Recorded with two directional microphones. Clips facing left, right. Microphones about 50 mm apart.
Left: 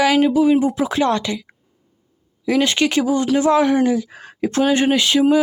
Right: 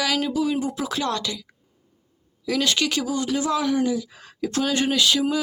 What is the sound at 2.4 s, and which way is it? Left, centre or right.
Speech, left.